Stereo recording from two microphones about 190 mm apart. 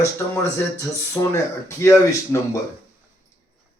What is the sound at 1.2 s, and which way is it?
Speech, 20° left (ahead or behind).